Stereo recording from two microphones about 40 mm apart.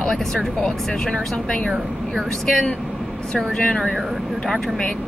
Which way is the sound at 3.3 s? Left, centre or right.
Left.